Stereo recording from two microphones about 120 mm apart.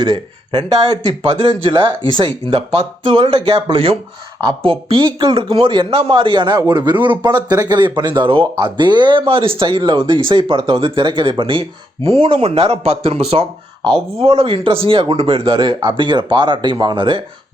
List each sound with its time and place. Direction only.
0.0 s speech: 35° right (ahead or behind)